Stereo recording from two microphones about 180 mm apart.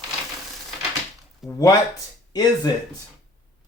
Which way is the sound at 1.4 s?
20° left (ahead or behind).